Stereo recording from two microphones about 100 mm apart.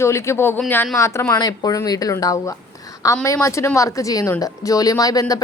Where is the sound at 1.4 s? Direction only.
40° left (ahead or behind).